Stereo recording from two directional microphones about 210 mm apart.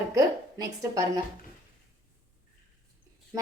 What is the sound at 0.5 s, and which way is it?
Speech, 20° right (ahead or behind).